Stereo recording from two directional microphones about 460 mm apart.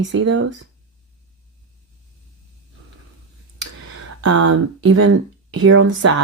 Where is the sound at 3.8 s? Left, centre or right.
Right.